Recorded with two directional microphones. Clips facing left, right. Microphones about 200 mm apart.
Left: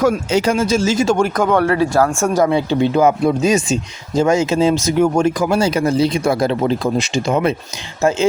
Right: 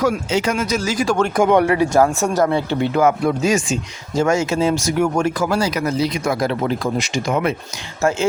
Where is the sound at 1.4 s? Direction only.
15° right (ahead or behind).